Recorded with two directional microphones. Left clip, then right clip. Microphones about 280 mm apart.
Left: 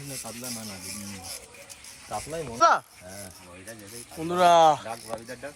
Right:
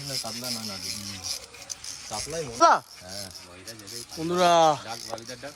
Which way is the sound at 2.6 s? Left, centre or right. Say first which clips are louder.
Right 1 dB; centre.